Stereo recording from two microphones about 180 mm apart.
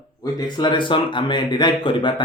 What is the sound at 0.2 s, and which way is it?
Speech, 25° left (ahead or behind).